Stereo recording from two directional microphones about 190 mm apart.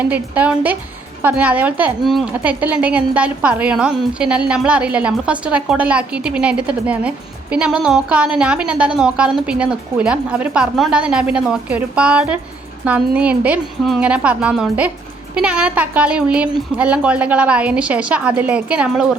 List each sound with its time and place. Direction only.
0.0 s a woman's voice: 10° right (ahead or behind)